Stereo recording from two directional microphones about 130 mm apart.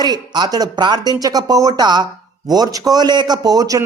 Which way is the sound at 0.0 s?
30° right (ahead or behind).